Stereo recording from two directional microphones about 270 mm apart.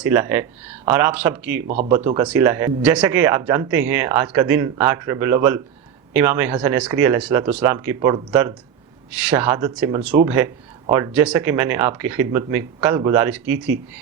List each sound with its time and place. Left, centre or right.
0.0 s speech: centre
1.6 s speech: right
2.0 s speech: centre